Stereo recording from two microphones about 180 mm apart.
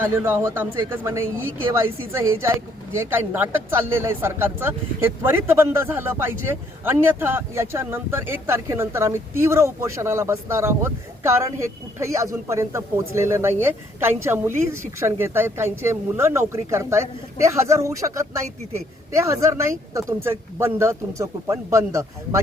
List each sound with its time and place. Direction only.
0.0 s a man's voice: 10° right (ahead or behind)